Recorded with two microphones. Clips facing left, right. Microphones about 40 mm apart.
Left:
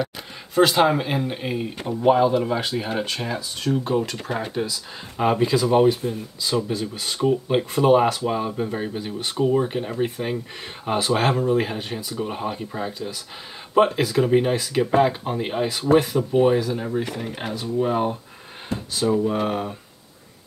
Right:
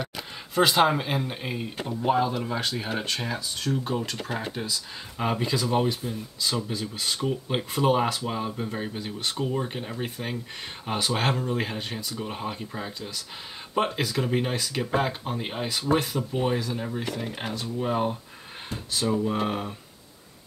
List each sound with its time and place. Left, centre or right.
0.6 s speech: centre
3.7 s speech: centre